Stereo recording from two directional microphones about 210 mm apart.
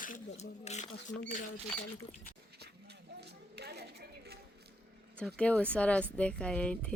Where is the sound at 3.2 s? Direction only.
50° right (ahead or behind).